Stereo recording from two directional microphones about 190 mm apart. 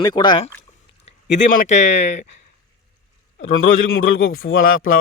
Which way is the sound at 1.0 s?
35° left (ahead or behind).